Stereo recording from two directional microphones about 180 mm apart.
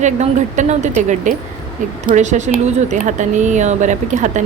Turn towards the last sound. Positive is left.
turn(degrees=-45)  # may be behind; listen again after turning